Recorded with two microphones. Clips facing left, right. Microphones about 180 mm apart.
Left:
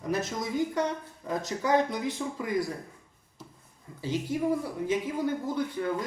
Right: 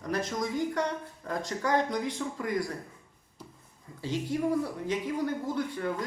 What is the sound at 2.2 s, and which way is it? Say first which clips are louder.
Speech: left 1 dB; 15° left (ahead or behind).